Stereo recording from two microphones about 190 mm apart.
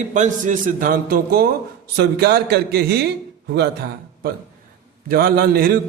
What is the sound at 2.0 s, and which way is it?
A man's voice, 55° right (ahead or behind).